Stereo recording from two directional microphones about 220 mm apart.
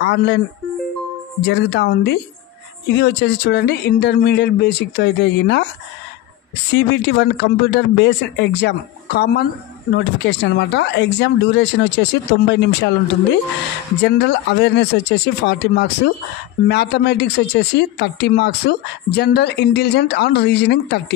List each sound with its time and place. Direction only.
0.0 s speech: 50° left (ahead or behind)
1.4 s speech: 50° left (ahead or behind)
6.7 s speech: 50° left (ahead or behind)
14.0 s speech: 50° left (ahead or behind)